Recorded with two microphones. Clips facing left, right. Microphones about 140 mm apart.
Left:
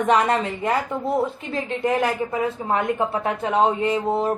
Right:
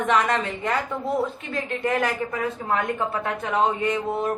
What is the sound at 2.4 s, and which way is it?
A woman's voice, 20° left (ahead or behind).